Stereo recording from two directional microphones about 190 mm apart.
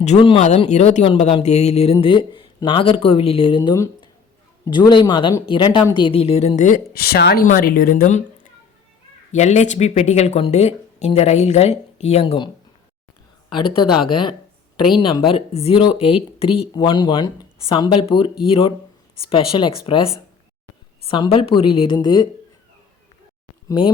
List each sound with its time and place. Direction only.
0.0 s a woman's voice: 30° left (ahead or behind); by 8.2 s 45° left (ahead or behind)
9.3 s speech: 40° left (ahead or behind)
13.5 s speech: 25° left (ahead or behind)
15.0 s a woman's voice: 30° left (ahead or behind)
23.6 s speech: 25° left (ahead or behind)